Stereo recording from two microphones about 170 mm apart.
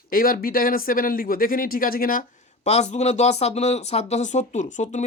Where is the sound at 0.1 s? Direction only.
60° left (ahead or behind).